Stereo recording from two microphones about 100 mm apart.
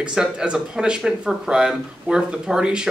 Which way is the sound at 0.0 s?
5° right (ahead or behind).